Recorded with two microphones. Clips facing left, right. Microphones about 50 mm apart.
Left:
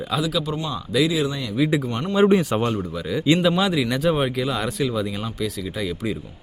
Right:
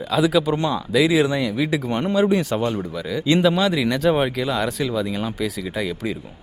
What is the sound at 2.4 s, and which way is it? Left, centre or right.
Speech, centre.